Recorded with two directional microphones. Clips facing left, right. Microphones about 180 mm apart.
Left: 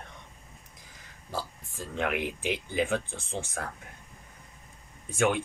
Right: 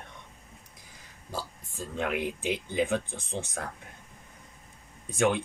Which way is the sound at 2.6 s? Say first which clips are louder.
Right 1 dB; 20° right (ahead or behind).